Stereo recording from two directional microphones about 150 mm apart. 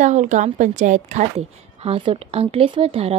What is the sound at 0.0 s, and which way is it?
Speech, 55° right (ahead or behind).